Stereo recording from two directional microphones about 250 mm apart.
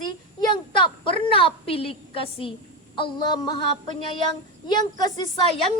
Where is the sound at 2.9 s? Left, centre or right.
Centre.